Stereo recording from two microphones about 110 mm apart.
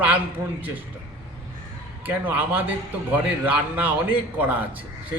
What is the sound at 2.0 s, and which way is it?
A man's voice, 15° right (ahead or behind).